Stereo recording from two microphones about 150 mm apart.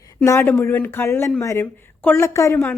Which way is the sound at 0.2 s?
15° left (ahead or behind).